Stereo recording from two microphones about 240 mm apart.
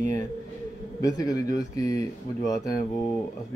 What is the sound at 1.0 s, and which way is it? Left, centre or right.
Speech, centre.